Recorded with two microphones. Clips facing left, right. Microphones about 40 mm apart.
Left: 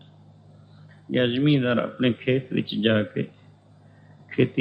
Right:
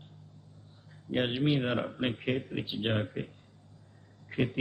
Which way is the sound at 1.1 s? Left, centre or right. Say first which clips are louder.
Left 8 dB; left.